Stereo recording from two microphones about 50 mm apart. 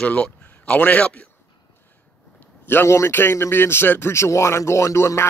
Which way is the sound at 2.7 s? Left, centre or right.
Left.